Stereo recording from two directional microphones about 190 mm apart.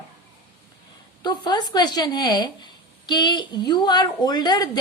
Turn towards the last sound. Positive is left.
turn(degrees=20)  # may be behind; listen again after turning